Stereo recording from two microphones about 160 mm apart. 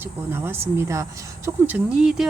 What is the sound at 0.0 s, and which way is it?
Speech, 15° right (ahead or behind).